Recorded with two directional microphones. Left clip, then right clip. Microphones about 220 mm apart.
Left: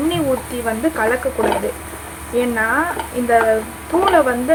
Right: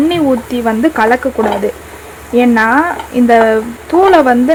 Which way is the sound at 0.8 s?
40° right (ahead or behind).